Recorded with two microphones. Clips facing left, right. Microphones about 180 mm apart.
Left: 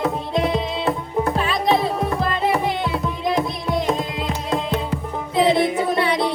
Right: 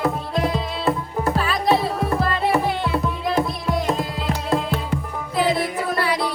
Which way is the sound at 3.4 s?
Centre (ahead or behind).